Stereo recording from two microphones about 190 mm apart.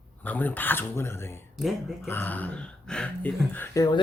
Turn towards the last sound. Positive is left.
turn(degrees=10)  # may be behind; listen again after turning